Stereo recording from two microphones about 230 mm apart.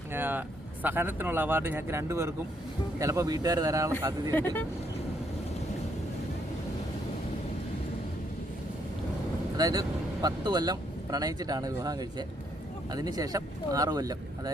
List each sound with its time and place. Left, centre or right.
0.1 s speech: centre
4.3 s speech: centre
9.6 s speech: centre